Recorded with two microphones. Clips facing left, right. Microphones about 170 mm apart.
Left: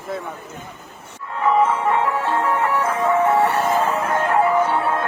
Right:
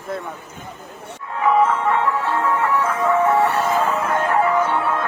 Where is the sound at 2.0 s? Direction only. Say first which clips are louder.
Even; 20° left (ahead or behind).